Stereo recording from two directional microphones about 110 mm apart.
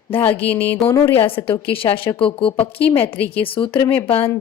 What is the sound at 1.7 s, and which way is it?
A woman's voice, 55° left (ahead or behind).